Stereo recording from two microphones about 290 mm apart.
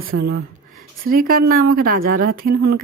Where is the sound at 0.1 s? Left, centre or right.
Right.